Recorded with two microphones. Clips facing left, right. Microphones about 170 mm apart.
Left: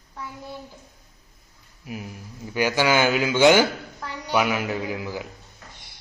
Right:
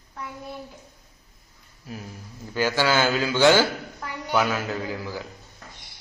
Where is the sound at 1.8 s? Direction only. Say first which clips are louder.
Left 3 dB; 15° left (ahead or behind).